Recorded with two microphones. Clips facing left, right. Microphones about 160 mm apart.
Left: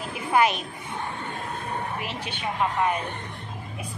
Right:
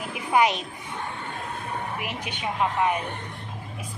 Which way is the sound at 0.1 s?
20° right (ahead or behind).